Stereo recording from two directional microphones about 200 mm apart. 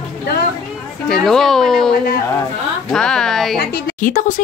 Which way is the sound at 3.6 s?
45° left (ahead or behind).